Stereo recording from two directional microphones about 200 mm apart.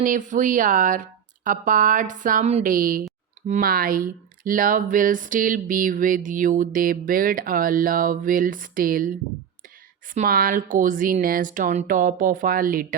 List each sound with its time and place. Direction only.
0.0 s a woman's voice: 40° right (ahead or behind)
10.2 s speech: 45° right (ahead or behind)